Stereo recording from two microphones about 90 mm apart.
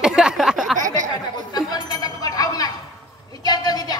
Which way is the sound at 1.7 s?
50° left (ahead or behind).